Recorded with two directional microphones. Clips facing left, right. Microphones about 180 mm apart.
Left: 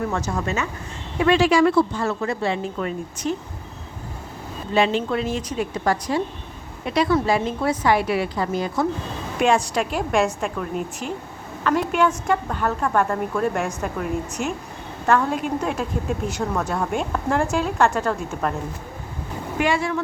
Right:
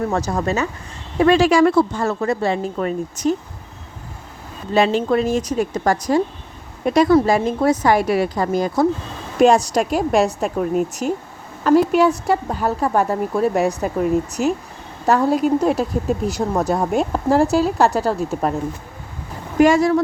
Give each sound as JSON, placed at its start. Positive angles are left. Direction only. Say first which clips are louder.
{"t": 0.1, "sound": "a woman's voice", "louder": "right 5 dB", "side_deg": -35}
{"t": 4.7, "sound": "a woman's voice", "louder": "right 4 dB", "side_deg": -40}
{"t": 14.4, "sound": "speech", "louder": "right 7 dB", "side_deg": -5}
{"t": 15.0, "sound": "a woman's voice", "louder": "right 5 dB", "side_deg": -40}
{"t": 19.5, "sound": "a woman's voice", "louder": "right 9 dB", "side_deg": -40}